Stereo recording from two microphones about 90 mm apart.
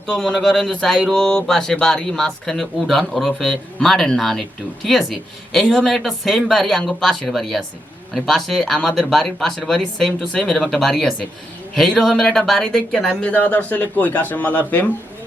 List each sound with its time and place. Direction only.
0.1 s speech: 5° left (ahead or behind)
13.2 s speech: 20° left (ahead or behind)